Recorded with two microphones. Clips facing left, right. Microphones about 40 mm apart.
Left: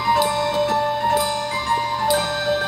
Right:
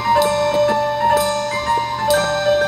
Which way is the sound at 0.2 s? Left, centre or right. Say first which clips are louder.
Right 4 dB; centre.